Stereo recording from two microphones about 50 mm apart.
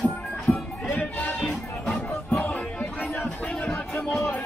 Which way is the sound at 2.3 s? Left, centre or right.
Left.